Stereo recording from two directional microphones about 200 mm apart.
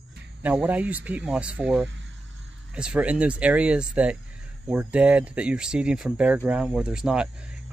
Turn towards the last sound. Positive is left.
turn(degrees=-5)  # may be behind; listen again after turning